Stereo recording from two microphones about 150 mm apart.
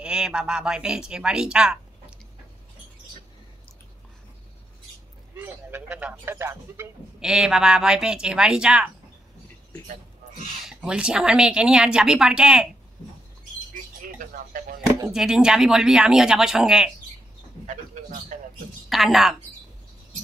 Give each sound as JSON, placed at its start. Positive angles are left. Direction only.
{"t": 0.0, "sound": "a woman's voice", "side_deg": -5}
{"t": 5.3, "sound": "speech", "side_deg": -15}
{"t": 7.2, "sound": "a woman's voice", "side_deg": -5}
{"t": 10.6, "sound": "a woman's voice", "side_deg": -5}
{"t": 14.1, "sound": "speech", "side_deg": -65}
{"t": 15.1, "sound": "a woman's voice", "side_deg": -5}
{"t": 18.9, "sound": "a woman's voice", "side_deg": 0}